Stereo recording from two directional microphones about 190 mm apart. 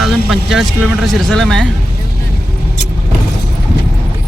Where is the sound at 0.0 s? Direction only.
Centre (ahead or behind).